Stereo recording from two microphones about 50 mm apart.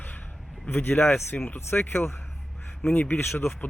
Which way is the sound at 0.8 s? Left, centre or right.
Left.